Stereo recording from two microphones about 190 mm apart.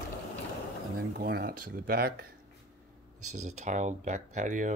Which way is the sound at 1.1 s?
55° right (ahead or behind).